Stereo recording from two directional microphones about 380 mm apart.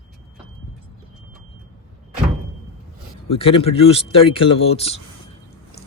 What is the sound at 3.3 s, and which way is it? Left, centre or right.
A man's voice, centre.